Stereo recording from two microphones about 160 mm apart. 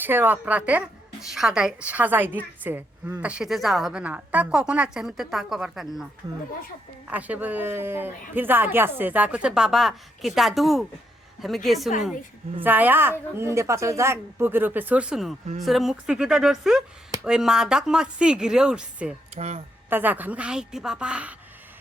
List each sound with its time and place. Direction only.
0.0 s a woman's voice: 10° right (ahead or behind)
7.1 s a woman's voice: 10° right (ahead or behind)
12.6 s a woman's voice: 10° right (ahead or behind)
19.4 s speech: 45° right (ahead or behind)
19.9 s speech: 10° right (ahead or behind)